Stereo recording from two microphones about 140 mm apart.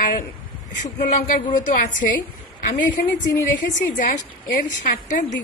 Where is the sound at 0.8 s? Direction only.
70° left (ahead or behind).